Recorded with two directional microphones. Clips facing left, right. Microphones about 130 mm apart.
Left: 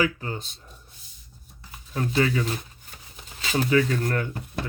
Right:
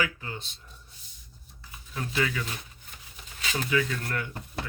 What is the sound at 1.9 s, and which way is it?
Speech, 35° left (ahead or behind).